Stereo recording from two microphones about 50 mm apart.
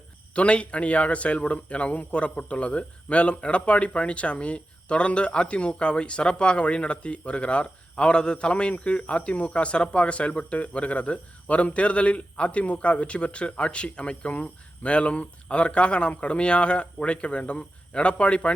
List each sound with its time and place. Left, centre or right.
0.3 s speech: left